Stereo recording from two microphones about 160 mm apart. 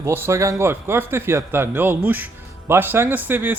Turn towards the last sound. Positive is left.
turn(degrees=-10)  # may be behind; listen again after turning